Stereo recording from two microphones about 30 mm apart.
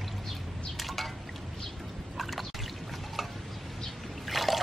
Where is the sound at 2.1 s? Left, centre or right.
Centre.